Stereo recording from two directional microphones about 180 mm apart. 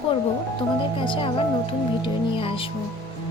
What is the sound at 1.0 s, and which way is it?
Speech, 30° left (ahead or behind).